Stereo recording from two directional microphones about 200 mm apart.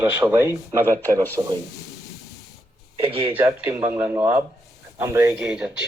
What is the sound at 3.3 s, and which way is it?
Speech, 10° right (ahead or behind).